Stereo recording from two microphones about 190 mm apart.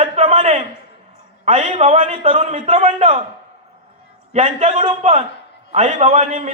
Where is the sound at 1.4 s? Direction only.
35° right (ahead or behind).